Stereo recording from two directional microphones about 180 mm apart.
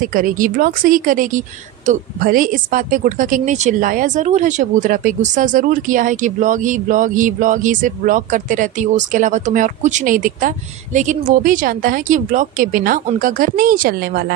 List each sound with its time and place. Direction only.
0.0 s speech: 50° right (ahead or behind)